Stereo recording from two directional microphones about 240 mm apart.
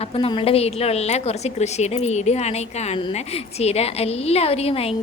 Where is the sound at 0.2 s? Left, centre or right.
Left.